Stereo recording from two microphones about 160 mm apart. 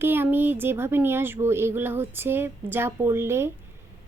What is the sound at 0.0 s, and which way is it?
A woman's voice, 15° right (ahead or behind).